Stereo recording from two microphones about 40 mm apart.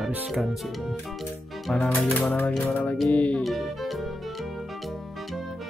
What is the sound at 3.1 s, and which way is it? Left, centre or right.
Speech, left.